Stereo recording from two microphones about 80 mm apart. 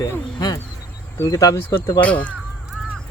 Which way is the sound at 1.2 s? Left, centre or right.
Left.